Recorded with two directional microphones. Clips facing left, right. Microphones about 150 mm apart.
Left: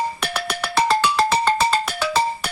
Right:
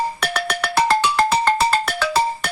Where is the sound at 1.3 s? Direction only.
5° right (ahead or behind).